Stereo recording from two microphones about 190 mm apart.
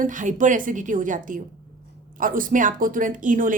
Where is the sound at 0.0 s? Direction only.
45° right (ahead or behind).